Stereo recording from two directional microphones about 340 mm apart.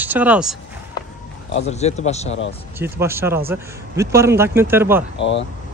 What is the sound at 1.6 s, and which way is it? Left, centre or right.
Speech, centre.